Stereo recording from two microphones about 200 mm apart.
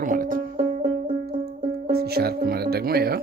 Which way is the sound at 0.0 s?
45° right (ahead or behind).